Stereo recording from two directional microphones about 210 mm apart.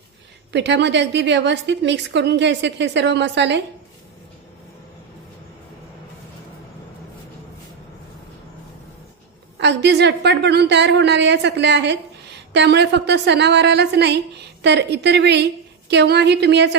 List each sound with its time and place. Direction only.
0.5 s a woman's voice: 55° right (ahead or behind)
9.6 s a woman's voice: 55° right (ahead or behind)